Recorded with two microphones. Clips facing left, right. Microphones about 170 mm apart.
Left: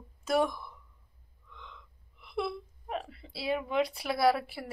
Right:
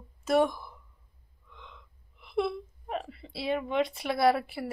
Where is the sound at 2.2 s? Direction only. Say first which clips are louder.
Right 4 dB; centre (ahead or behind).